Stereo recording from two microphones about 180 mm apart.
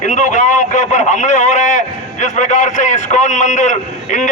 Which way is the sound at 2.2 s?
45° left (ahead or behind).